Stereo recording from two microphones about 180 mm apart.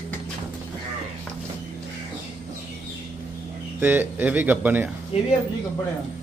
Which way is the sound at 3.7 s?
10° right (ahead or behind).